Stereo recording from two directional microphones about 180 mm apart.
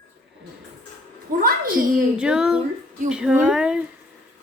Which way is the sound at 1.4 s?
55° right (ahead or behind).